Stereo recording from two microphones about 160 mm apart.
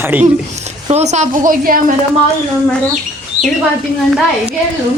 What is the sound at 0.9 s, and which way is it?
Speech, 45° right (ahead or behind).